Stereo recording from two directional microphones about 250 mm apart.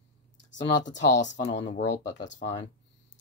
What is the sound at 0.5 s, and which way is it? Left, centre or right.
Speech, left.